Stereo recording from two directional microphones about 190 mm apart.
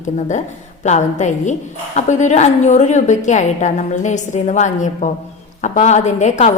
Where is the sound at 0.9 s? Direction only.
40° left (ahead or behind).